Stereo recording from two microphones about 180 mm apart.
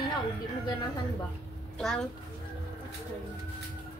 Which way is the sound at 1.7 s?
5° left (ahead or behind).